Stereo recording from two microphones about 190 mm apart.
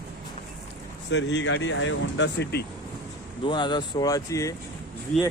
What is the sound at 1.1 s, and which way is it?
Speech, 65° left (ahead or behind).